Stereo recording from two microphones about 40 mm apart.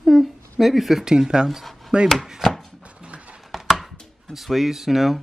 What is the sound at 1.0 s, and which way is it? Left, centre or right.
Speech, centre.